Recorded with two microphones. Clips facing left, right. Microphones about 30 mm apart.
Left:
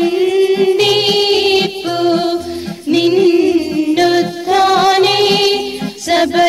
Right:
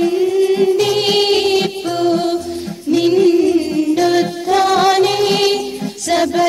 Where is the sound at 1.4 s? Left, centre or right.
Left.